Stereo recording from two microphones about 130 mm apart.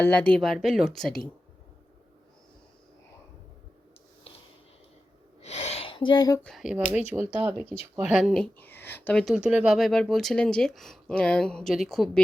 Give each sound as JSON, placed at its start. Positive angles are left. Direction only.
{"t": 0.0, "sound": "speech", "side_deg": 10}
{"t": 5.4, "sound": "a sound", "side_deg": 55}
{"t": 6.4, "sound": "speech", "side_deg": 0}
{"t": 8.1, "sound": "speech", "side_deg": 0}
{"t": 8.5, "sound": "speech", "side_deg": 15}
{"t": 9.2, "sound": "speech", "side_deg": -5}
{"t": 9.7, "sound": "speech", "side_deg": 5}